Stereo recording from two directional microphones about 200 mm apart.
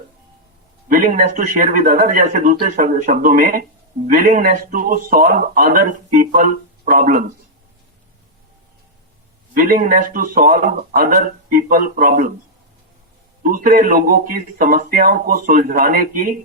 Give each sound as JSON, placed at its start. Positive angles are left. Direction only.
{"t": 0.9, "sound": "speech", "side_deg": -40}
{"t": 9.6, "sound": "speech", "side_deg": -45}
{"t": 13.4, "sound": "speech", "side_deg": -45}